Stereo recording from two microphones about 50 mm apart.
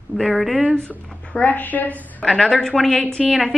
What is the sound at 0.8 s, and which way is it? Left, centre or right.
A woman's voice, left.